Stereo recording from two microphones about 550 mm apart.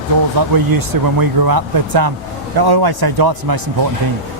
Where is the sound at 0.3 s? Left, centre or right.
Right.